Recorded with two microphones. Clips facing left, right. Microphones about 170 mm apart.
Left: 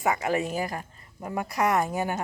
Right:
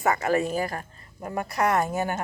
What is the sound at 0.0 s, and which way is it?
A woman's voice, 15° left (ahead or behind).